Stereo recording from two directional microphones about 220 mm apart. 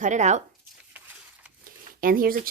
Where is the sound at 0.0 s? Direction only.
35° right (ahead or behind).